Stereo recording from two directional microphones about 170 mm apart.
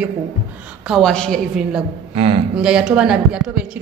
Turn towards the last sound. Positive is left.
turn(degrees=-5)  # may be behind; listen again after turning